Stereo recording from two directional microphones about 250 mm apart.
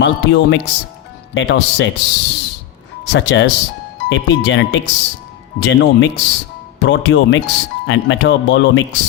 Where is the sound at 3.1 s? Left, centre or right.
Left.